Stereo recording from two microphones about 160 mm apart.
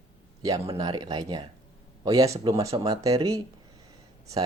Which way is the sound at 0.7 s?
25° right (ahead or behind).